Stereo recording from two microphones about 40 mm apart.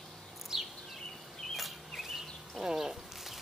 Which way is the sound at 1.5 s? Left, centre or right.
Centre.